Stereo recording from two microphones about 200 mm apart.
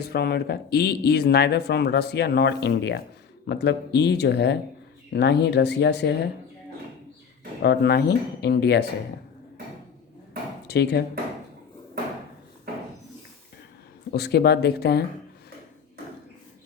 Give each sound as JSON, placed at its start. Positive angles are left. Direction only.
{"t": 0.0, "sound": "speech", "side_deg": 50}
{"t": 7.6, "sound": "speech", "side_deg": 55}
{"t": 10.7, "sound": "speech", "side_deg": 55}
{"t": 14.1, "sound": "speech", "side_deg": 55}